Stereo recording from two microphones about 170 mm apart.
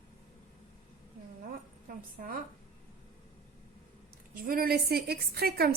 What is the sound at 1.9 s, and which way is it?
Speech, 55° right (ahead or behind).